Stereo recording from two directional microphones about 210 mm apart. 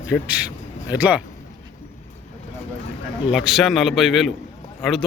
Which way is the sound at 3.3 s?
Centre (ahead or behind).